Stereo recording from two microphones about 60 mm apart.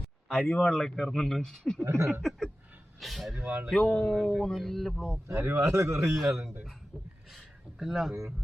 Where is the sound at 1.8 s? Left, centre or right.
Right.